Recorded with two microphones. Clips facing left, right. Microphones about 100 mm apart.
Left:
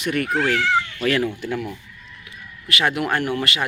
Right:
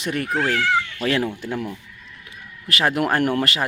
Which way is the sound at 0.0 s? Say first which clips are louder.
Left 1 dB; 30° right (ahead or behind).